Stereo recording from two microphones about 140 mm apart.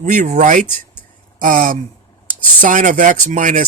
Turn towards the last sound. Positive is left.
turn(degrees=-70)  # may be behind; listen again after turning